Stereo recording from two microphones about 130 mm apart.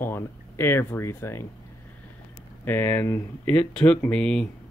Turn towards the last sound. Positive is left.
turn(degrees=5)  # may be behind; listen again after turning